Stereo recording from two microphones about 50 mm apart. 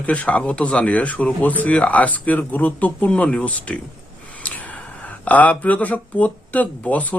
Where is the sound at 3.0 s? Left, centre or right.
Left.